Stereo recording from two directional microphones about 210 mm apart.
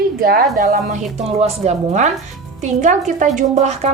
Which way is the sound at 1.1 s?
30° right (ahead or behind).